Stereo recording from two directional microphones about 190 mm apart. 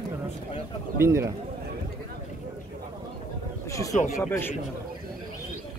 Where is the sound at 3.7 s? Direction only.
15° left (ahead or behind).